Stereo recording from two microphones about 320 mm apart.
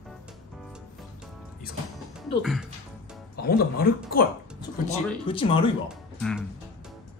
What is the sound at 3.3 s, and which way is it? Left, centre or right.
Speech, left.